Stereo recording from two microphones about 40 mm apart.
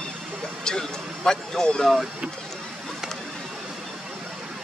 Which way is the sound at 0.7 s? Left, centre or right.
Centre.